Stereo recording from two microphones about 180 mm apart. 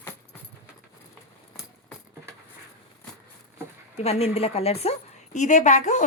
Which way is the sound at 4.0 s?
35° left (ahead or behind).